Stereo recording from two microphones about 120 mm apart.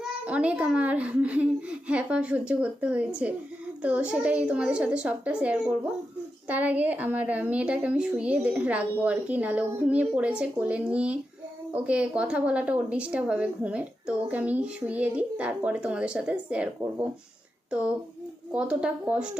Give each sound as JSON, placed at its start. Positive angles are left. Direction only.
{"t": 0.3, "sound": "a woman's voice", "side_deg": -10}
{"t": 17.7, "sound": "a woman's voice", "side_deg": -10}